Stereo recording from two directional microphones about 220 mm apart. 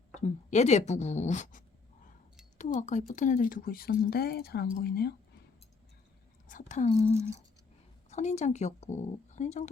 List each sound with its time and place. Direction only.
0.2 s speech: 30° left (ahead or behind)
6.5 s speech: 35° left (ahead or behind)